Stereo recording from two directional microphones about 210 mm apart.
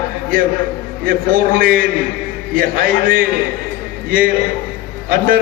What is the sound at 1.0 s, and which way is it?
A man's voice, 40° right (ahead or behind).